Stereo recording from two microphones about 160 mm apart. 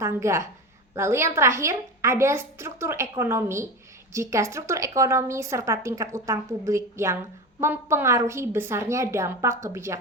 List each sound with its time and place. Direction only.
0.0 s a woman's voice: 15° right (ahead or behind)